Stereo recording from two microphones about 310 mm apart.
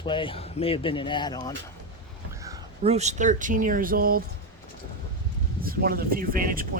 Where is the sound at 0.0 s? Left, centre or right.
Centre.